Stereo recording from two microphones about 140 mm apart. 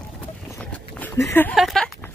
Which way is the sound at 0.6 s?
10° left (ahead or behind).